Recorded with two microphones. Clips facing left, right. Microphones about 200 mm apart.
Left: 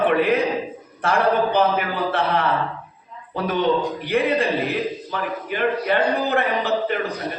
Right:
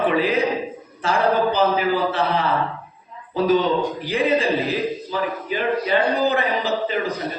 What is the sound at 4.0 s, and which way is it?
A man's voice, 60° left (ahead or behind).